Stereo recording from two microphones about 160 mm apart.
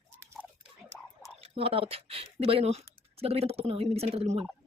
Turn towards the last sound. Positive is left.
turn(degrees=-40)  # may be behind; listen again after turning